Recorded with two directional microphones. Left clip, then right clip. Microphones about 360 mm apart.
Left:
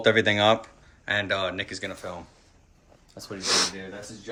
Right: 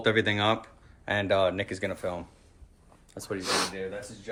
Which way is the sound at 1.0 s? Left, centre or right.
Centre.